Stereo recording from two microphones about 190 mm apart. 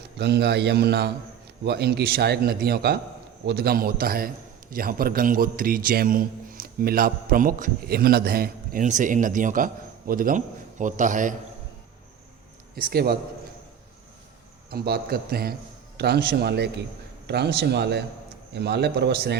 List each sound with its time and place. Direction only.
0.2 s a man's voice: 60° right (ahead or behind); by 11.3 s 40° right (ahead or behind)
12.7 s a man's voice: 50° right (ahead or behind)
14.7 s a man's voice: 55° right (ahead or behind)